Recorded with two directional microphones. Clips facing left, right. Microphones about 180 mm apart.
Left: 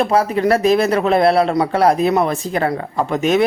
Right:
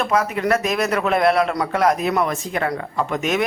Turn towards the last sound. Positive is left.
turn(degrees=30)  # may be behind; listen again after turning